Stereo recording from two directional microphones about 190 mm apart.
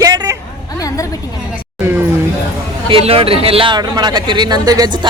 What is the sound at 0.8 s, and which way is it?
Speech, 15° left (ahead or behind).